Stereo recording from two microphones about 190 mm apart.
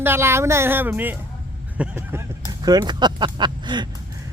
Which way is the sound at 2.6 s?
20° right (ahead or behind).